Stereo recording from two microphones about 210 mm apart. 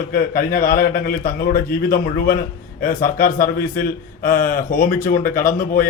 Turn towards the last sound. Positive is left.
turn(degrees=40)  # may be behind; listen again after turning